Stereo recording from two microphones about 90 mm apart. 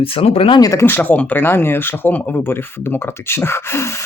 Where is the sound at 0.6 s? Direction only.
40° left (ahead or behind).